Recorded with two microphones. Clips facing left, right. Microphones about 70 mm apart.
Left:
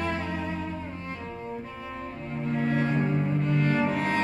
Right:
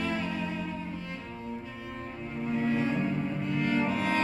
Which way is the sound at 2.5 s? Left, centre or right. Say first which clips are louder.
Left 2 dB; left.